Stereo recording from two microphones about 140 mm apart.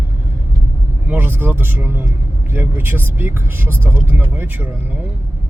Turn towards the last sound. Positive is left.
turn(degrees=-15)  # may be behind; listen again after turning